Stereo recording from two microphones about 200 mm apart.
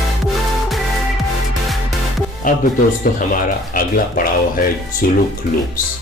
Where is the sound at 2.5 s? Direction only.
45° left (ahead or behind).